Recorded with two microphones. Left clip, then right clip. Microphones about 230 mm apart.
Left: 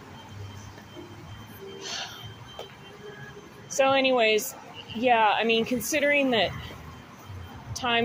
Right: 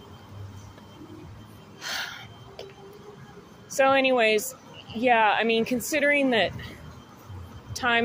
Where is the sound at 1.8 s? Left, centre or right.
Centre.